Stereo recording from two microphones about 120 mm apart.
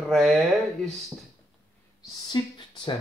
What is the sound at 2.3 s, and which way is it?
Speech, 35° left (ahead or behind).